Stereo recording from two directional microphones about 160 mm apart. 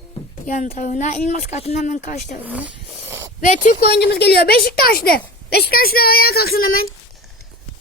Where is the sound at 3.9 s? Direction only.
90° left; by 6.8 s 65° left (ahead or behind).